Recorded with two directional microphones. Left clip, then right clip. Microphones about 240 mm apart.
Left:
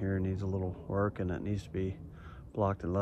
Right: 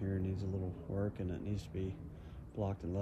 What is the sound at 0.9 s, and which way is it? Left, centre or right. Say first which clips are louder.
Speech: left 8 dB; centre.